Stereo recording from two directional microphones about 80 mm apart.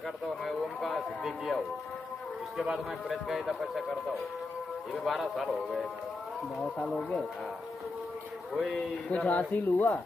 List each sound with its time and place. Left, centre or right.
0.5 s a man's voice: centre
2.6 s a man's voice: centre
8.5 s speech: centre